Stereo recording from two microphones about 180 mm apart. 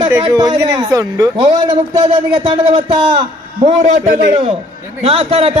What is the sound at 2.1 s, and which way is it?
Speech, 35° right (ahead or behind).